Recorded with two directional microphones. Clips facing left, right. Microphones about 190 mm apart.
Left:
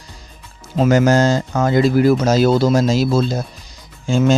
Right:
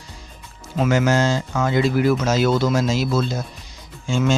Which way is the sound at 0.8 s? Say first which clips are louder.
Left 5 dB; 40° left (ahead or behind).